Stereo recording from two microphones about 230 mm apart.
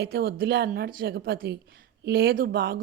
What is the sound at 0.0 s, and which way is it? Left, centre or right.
A woman's voice, right.